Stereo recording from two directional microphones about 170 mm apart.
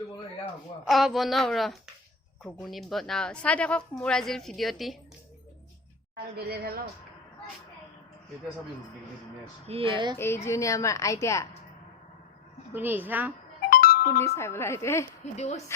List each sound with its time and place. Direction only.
0.9 s a woman's voice: centre (ahead or behind)
6.3 s a woman's voice: 70° right (ahead or behind)
9.6 s speech: 35° right (ahead or behind)
10.2 s a woman's voice: 15° left (ahead or behind)
12.7 s a woman's voice: 10° right (ahead or behind)
13.7 s music: 60° left (ahead or behind)
14.2 s a woman's voice: 15° left (ahead or behind)
15.4 s a woman's voice: 40° left (ahead or behind)